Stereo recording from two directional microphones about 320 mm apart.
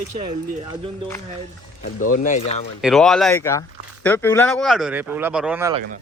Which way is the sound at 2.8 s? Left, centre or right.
Centre.